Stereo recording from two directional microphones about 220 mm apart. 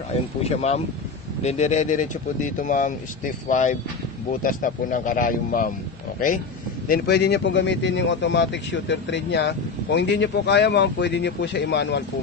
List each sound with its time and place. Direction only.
0.1 s speech: 30° left (ahead or behind)
6.9 s speech: 50° left (ahead or behind)